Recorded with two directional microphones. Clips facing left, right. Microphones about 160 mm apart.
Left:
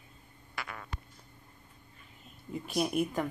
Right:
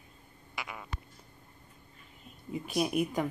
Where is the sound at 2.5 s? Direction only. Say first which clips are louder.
Right 1 dB; 5° right (ahead or behind).